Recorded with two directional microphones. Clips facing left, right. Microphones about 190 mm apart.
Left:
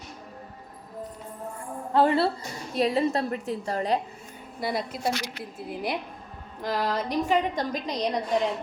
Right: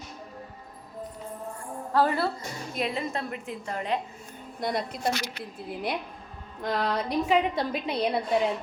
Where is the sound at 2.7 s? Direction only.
35° left (ahead or behind).